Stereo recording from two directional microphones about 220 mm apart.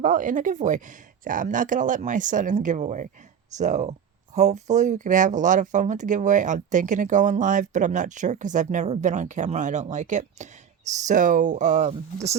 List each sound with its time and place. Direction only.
0.0 s speech: 35° right (ahead or behind)